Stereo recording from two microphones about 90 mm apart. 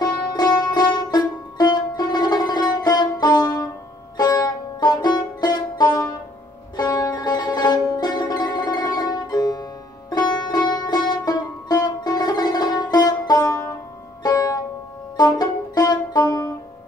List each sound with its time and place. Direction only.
0.0 s music: 50° left (ahead or behind)